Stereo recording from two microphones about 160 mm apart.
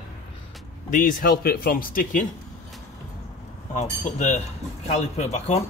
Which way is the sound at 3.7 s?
45° left (ahead or behind).